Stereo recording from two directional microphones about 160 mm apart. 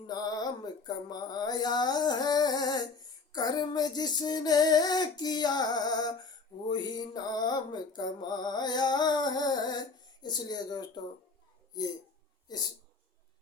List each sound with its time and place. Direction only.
0.1 s music: 25° left (ahead or behind)